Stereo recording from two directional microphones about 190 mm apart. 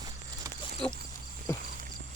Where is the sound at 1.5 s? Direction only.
15° left (ahead or behind).